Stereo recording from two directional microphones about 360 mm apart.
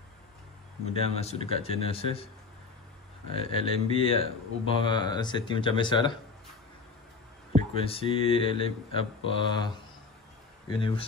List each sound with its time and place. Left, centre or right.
0.8 s speech: centre
3.3 s speech: centre
7.7 s speech: centre
10.7 s speech: centre